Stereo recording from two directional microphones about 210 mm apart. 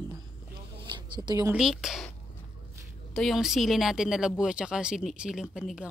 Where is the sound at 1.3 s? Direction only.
15° right (ahead or behind).